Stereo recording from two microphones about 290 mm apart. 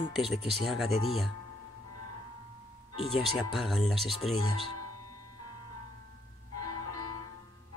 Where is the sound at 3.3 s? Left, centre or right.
Centre.